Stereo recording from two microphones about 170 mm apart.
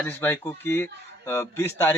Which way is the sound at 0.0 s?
15° left (ahead or behind).